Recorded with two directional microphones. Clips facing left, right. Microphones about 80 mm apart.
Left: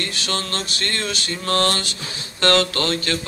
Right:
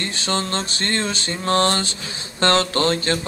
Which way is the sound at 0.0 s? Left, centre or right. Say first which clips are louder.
Right 2 dB; right.